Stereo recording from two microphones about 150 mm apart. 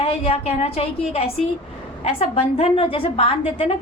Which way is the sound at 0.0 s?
40° left (ahead or behind).